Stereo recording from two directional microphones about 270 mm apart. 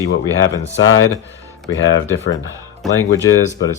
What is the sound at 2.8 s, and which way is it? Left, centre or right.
Speech, centre.